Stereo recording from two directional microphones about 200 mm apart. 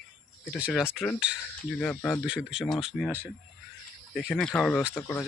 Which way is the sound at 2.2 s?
5° right (ahead or behind).